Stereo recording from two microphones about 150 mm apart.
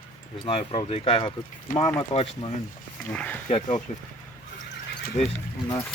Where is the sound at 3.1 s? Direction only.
10° left (ahead or behind).